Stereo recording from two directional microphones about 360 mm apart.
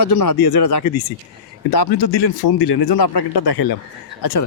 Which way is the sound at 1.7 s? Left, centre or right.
Left.